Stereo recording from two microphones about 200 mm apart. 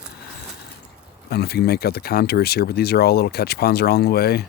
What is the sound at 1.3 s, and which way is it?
Speech, 50° left (ahead or behind).